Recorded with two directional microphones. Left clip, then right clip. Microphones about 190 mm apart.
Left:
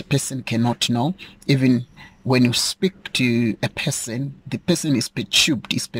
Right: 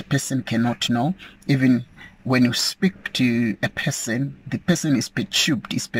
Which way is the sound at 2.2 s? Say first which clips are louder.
Left 2 dB; 25° left (ahead or behind).